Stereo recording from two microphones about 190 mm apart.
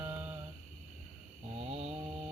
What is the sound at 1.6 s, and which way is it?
Mantra, 30° right (ahead or behind).